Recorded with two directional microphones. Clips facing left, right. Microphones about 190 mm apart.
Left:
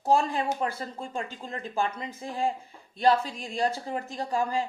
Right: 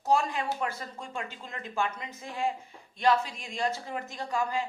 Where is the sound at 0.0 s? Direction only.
30° left (ahead or behind).